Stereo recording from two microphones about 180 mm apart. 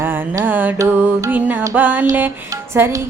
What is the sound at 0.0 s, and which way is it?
Music, 10° right (ahead or behind).